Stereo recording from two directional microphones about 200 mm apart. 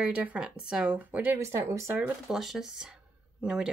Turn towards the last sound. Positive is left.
turn(degrees=-5)  # may be behind; listen again after turning